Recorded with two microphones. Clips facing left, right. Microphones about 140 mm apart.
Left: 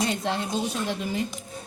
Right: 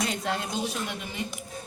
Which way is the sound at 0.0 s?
30° left (ahead or behind).